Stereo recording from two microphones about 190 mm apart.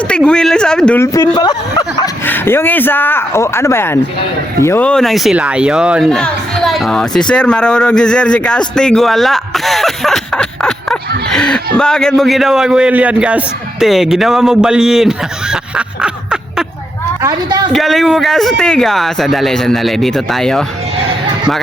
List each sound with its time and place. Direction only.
0.1 s speech: 5° left (ahead or behind)
16.0 s a sound: 5° right (ahead or behind)
17.2 s a woman's voice: 20° right (ahead or behind)
17.7 s speech: centre (ahead or behind)